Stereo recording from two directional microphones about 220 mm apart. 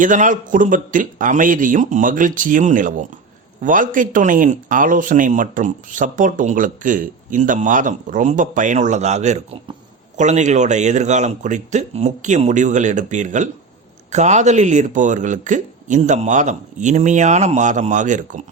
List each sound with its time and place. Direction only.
0.0 s speech: 35° right (ahead or behind)